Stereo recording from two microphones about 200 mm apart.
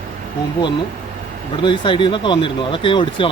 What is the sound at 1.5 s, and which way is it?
Speech, 25° left (ahead or behind).